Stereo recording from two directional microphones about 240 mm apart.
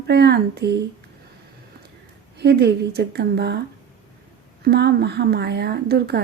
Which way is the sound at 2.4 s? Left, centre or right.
Right.